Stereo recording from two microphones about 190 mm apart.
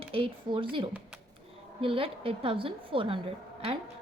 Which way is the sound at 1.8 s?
30° right (ahead or behind).